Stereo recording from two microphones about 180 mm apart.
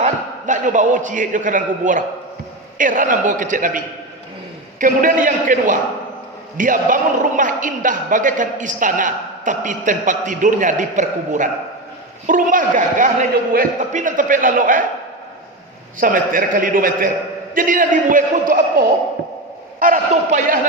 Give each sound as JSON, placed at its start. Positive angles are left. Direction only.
{"t": 0.0, "sound": "a man's voice", "side_deg": -45}
{"t": 16.0, "sound": "a man's voice", "side_deg": -50}